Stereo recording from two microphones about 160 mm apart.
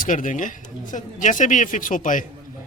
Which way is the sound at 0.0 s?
55° left (ahead or behind).